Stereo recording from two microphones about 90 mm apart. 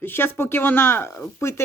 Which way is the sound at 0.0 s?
25° left (ahead or behind).